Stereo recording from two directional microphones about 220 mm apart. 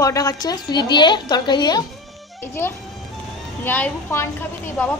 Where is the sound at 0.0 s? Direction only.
15° left (ahead or behind).